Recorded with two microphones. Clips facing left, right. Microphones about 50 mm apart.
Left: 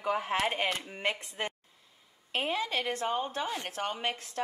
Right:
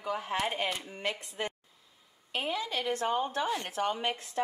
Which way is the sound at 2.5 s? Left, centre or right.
Left.